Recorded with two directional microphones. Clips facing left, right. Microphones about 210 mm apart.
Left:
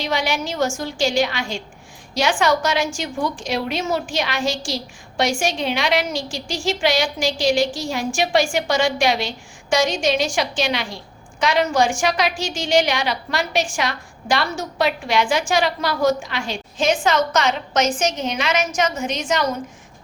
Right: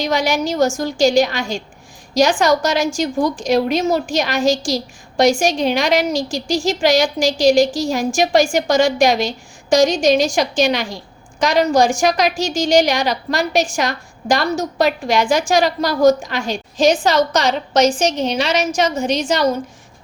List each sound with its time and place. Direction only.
0.0 s a woman's voice: 40° right (ahead or behind)